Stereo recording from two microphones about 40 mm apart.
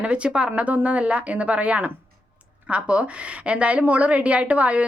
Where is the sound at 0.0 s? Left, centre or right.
Right.